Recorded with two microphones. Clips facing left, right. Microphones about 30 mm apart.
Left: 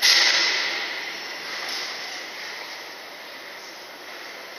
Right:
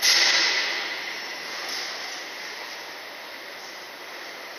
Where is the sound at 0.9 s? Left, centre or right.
Centre.